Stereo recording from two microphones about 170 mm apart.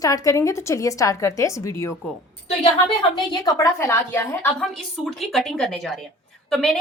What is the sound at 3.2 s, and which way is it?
A woman's voice, 20° left (ahead or behind).